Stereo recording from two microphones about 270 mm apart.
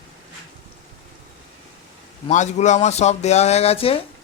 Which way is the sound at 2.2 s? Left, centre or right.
Left.